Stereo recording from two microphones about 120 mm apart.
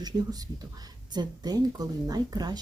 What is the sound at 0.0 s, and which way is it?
Speech, 35° right (ahead or behind).